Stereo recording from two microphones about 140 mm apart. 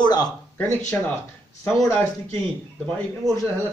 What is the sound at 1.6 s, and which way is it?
Speech, 10° left (ahead or behind).